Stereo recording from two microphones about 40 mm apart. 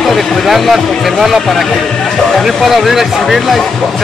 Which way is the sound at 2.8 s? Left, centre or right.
Centre.